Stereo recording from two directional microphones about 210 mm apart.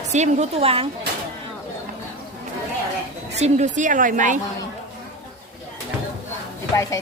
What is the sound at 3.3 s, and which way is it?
Speech, 35° right (ahead or behind).